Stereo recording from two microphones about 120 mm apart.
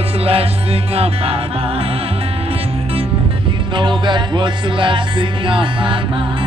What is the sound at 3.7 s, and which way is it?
Music, 40° right (ahead or behind).